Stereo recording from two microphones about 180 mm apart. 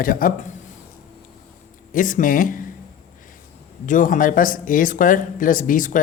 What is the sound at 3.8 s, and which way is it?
A man's voice, 45° left (ahead or behind).